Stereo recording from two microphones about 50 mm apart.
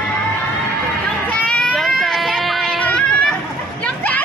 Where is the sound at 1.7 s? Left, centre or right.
Centre.